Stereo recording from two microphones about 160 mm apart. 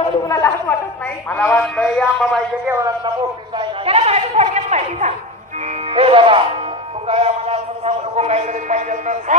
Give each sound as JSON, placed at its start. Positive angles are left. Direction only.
{"t": 0.3, "sound": "a sound", "side_deg": 15}
{"t": 1.3, "sound": "a man's voice", "side_deg": 10}
{"t": 3.5, "sound": "a woman's voice", "side_deg": -40}